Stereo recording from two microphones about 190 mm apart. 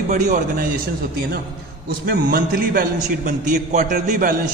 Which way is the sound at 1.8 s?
50° right (ahead or behind).